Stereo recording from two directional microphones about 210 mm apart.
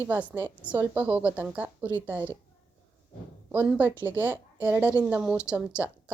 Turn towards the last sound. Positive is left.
turn(degrees=-5)  # may be behind; listen again after turning